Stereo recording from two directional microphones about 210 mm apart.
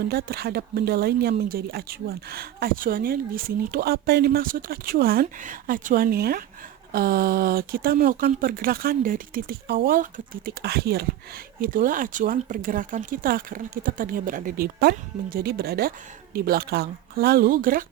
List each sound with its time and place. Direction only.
0.1 s speech: 45° right (ahead or behind)